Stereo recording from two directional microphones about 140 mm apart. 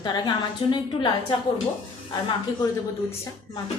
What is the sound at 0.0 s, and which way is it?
A woman's voice, 30° left (ahead or behind).